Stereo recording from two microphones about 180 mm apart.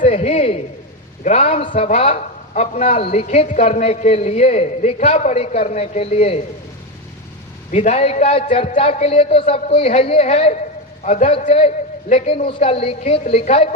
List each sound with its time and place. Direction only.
0.1 s a sound: 35° left (ahead or behind)
1.2 s a man's voice: 35° left (ahead or behind)
7.7 s a man's voice: 40° left (ahead or behind)